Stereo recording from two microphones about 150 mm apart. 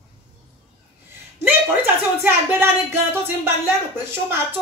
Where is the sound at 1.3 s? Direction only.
15° right (ahead or behind).